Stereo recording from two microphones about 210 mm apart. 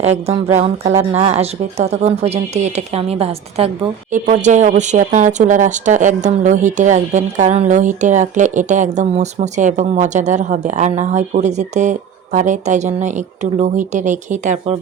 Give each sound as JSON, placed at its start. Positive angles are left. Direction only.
{"t": 0.0, "sound": "speech", "side_deg": -30}